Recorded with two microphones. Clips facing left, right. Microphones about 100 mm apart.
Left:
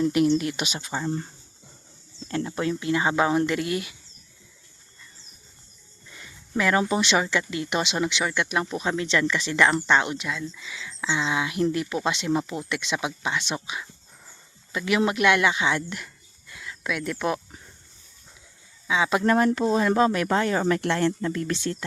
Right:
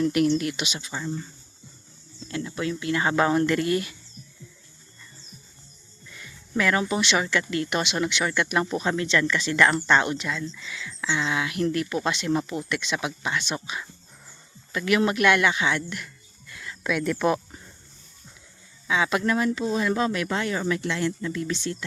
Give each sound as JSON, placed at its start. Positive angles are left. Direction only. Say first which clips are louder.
{"t": 0.1, "sound": "speech", "louder": "left 1 dB", "side_deg": 25}
{"t": 0.5, "sound": "speech", "louder": "left 2 dB", "side_deg": 45}
{"t": 2.2, "sound": "speech", "louder": "left 2 dB", "side_deg": 35}
{"t": 2.9, "sound": "speech", "louder": "right 1 dB", "side_deg": 20}
{"t": 6.1, "sound": "speech", "louder": "right 1 dB", "side_deg": 25}
{"t": 8.5, "sound": "speech", "louder": "right 1 dB", "side_deg": 5}
{"t": 9.0, "sound": "speech", "louder": "even", "side_deg": 20}
{"t": 10.7, "sound": "speech", "louder": "left 1 dB", "side_deg": 25}
{"t": 16.6, "sound": "speech", "louder": "right 3 dB", "side_deg": 5}
{"t": 18.9, "sound": "speech", "louder": "left 1 dB", "side_deg": 20}
{"t": 19.2, "sound": "speech", "louder": "left 4 dB", "side_deg": 45}